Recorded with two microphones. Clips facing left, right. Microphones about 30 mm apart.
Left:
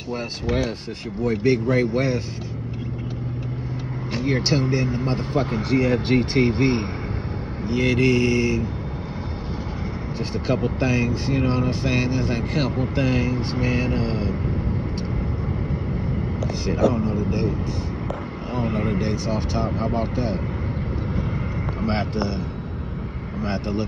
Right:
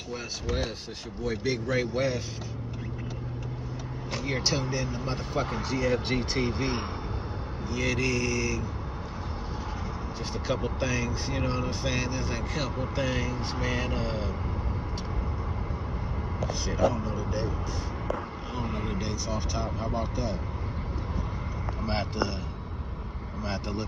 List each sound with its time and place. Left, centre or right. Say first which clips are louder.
1.2 s speech: left 9 dB; left
4.1 s speech: left 7 dB; left
10.4 s speech: left 7 dB; left
16.9 s speech: left 8 dB; left
18.5 s vehicle: left 10 dB; left
19.2 s speech: left 7 dB; left
21.8 s speech: left 7 dB; left
23.4 s speech: left 7 dB; left